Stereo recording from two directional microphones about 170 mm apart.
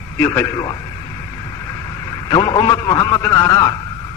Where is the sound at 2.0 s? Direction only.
25° left (ahead or behind).